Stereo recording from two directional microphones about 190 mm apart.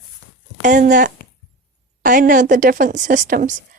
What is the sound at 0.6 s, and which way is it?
A woman's voice, 40° right (ahead or behind).